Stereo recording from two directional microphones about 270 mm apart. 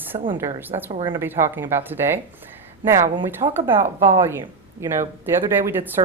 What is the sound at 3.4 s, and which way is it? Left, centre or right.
A woman's voice, centre.